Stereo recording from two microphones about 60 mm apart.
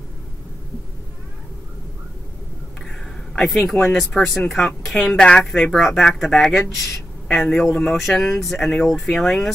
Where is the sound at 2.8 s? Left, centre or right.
Centre.